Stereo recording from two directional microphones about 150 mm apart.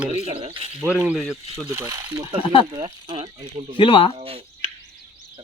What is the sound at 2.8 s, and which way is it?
Speech, 35° right (ahead or behind).